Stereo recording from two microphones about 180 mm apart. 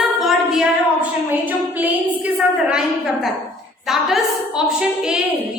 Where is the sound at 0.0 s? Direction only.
Centre (ahead or behind).